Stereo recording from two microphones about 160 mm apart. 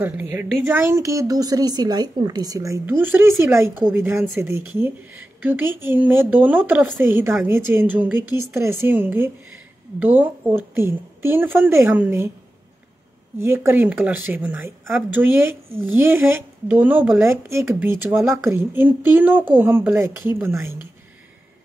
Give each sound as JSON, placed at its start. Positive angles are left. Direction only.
{"t": 0.0, "sound": "a woman's voice", "side_deg": -15}
{"t": 13.4, "sound": "a woman's voice", "side_deg": -15}